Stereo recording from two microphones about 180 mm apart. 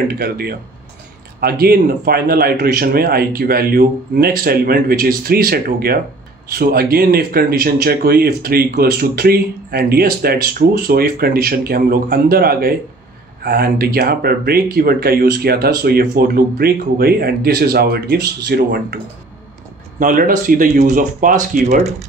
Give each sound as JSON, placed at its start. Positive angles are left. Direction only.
{"t": 0.1, "sound": "speech", "side_deg": -60}
{"t": 20.0, "sound": "speech", "side_deg": -50}